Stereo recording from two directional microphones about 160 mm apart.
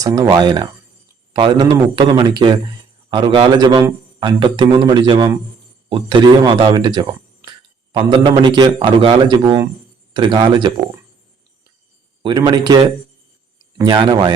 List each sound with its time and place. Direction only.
0.0 s a man's voice: 20° right (ahead or behind)
12.2 s a man's voice: 25° right (ahead or behind)